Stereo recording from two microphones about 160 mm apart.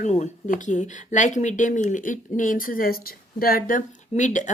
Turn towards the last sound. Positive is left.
turn(degrees=50)  # may be behind; listen again after turning